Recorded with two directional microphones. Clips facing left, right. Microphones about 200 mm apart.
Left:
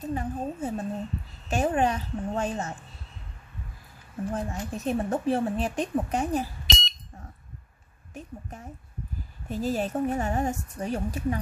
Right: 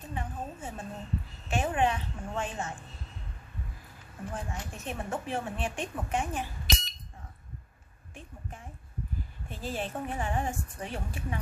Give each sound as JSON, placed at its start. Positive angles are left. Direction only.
{"t": 0.0, "sound": "a woman's voice", "side_deg": 40}
{"t": 4.3, "sound": "a woman's voice", "side_deg": 40}
{"t": 8.1, "sound": "a sound", "side_deg": 40}
{"t": 9.5, "sound": "a woman's voice", "side_deg": 40}